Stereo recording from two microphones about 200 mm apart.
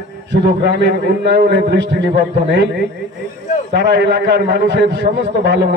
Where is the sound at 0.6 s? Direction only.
60° right (ahead or behind).